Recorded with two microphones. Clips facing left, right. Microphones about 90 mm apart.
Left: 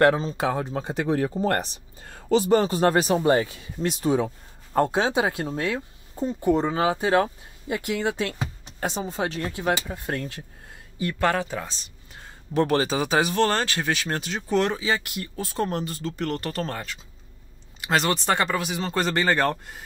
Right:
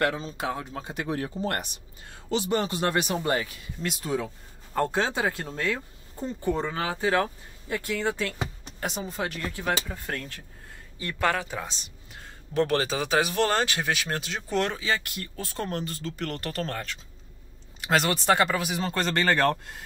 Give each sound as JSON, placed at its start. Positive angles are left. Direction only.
{"t": 0.2, "sound": "speech", "side_deg": 40}
{"t": 8.7, "sound": "speech", "side_deg": 30}
{"t": 12.1, "sound": "speech", "side_deg": 5}
{"t": 18.9, "sound": "speech", "side_deg": 5}